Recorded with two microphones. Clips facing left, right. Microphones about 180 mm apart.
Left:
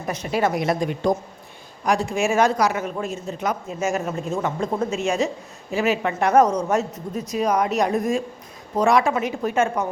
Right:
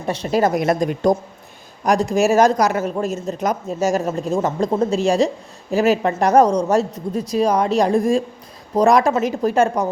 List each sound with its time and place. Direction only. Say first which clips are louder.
0.0 s a man's voice: right 4 dB; 30° right (ahead or behind)